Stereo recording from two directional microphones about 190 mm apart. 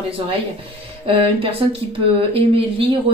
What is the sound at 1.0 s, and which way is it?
Speech, 30° right (ahead or behind).